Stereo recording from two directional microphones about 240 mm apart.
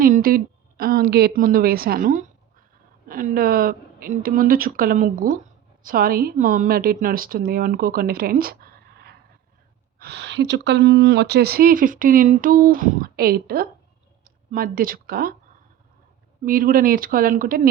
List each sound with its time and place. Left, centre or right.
0.0 s speech: right
16.5 s speech: right